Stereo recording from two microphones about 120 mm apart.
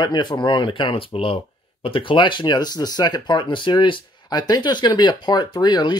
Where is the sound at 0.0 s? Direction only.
40° left (ahead or behind).